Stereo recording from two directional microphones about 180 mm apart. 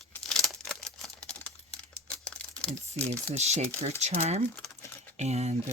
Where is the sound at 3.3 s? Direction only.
35° right (ahead or behind).